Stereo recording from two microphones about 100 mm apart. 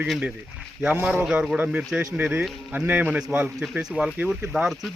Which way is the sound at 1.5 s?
15° right (ahead or behind).